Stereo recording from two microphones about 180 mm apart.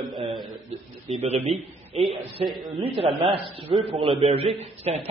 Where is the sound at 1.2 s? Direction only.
35° right (ahead or behind).